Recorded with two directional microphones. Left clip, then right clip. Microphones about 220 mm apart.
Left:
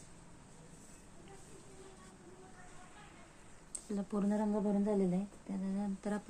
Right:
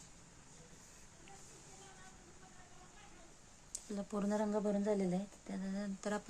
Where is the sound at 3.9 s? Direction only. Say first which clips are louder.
Left 2 dB; 10° right (ahead or behind).